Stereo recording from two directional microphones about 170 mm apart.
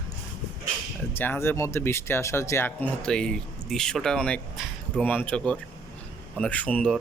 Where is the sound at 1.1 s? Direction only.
10° left (ahead or behind).